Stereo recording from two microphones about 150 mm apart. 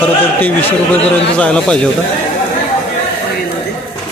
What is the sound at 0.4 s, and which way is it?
A man's voice, 10° left (ahead or behind).